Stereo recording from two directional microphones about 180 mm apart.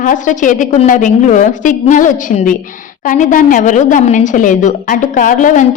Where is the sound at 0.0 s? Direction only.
45° left (ahead or behind).